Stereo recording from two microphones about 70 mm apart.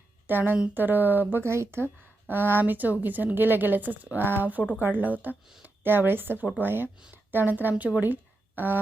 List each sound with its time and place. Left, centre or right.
0.3 s a woman's voice: right